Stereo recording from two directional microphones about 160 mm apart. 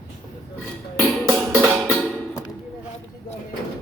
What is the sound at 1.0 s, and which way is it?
Music, centre (ahead or behind).